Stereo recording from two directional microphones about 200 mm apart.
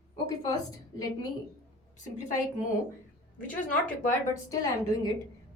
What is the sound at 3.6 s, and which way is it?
Speech, 40° left (ahead or behind).